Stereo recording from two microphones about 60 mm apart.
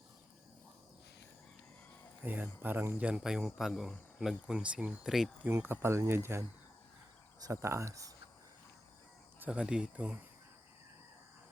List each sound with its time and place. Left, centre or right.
2.2 s speech: right
3.0 s speech: centre
4.5 s speech: right
5.0 s speech: centre
5.5 s speech: right
7.4 s speech: right
9.5 s speech: centre